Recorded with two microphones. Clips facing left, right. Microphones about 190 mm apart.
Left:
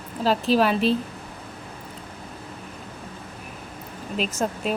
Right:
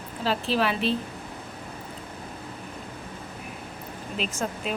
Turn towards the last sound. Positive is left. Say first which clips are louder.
# left 4 dB
turn(degrees=40)  # may be behind; listen again after turning